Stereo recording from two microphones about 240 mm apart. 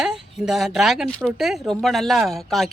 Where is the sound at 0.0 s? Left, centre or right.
Centre.